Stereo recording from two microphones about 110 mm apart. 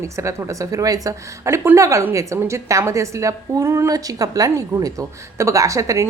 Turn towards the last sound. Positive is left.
turn(degrees=-30)  # may be behind; listen again after turning